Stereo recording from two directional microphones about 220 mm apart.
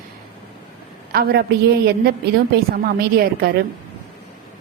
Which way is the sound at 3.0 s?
45° right (ahead or behind).